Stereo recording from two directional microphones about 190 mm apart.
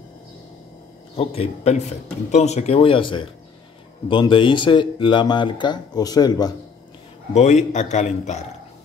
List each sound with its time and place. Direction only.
1.1 s a man's voice: 30° left (ahead or behind)
7.3 s a man's voice: 40° left (ahead or behind)